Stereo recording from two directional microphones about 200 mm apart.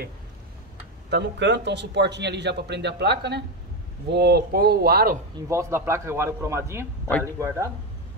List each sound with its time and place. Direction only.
1.1 s a man's voice: 60° right (ahead or behind)
5.5 s a man's voice: 15° right (ahead or behind)